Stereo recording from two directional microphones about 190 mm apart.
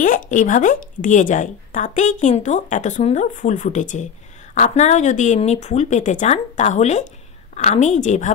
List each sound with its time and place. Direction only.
0.3 s a woman's voice: 45° left (ahead or behind)